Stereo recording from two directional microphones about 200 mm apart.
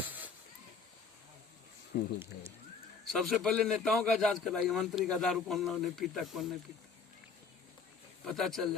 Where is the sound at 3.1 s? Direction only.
Centre (ahead or behind).